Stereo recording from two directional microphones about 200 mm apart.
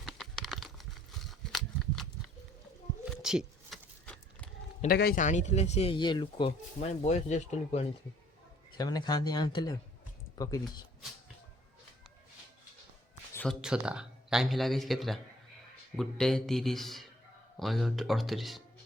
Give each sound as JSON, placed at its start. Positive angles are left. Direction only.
{"t": 0.0, "sound": "a sound", "side_deg": 0}
{"t": 4.9, "sound": "speech", "side_deg": 50}
{"t": 7.0, "sound": "speech", "side_deg": 35}
{"t": 8.8, "sound": "speech", "side_deg": 20}
{"t": 13.3, "sound": "speech", "side_deg": 5}